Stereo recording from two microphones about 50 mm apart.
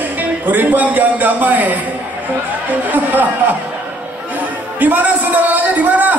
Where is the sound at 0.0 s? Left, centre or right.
Right.